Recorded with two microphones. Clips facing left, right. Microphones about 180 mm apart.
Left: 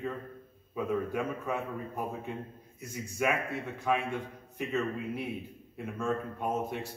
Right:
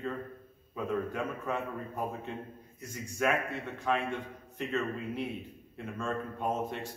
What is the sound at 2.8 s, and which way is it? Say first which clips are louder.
A man's voice: even; 5° left (ahead or behind).